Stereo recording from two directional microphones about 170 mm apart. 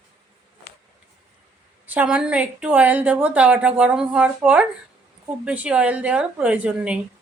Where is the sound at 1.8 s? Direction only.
10° right (ahead or behind).